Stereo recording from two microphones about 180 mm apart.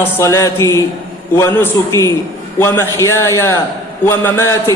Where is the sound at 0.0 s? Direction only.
15° left (ahead or behind).